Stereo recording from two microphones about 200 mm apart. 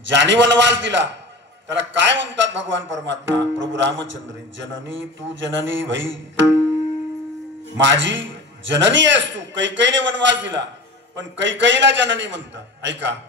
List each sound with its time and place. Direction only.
0.0 s a man's voice: 65° right (ahead or behind)
7.8 s a man's voice: 65° right (ahead or behind)